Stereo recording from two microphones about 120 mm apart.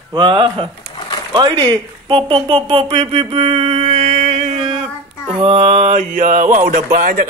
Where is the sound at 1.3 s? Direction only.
40° right (ahead or behind).